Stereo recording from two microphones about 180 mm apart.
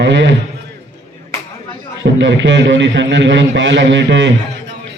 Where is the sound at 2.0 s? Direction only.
85° right.